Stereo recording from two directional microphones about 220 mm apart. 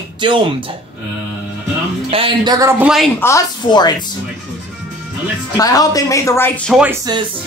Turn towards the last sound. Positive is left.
turn(degrees=0)  # may be behind; listen again after turning